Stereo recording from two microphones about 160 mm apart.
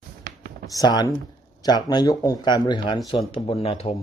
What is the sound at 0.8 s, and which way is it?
Speech, 25° left (ahead or behind).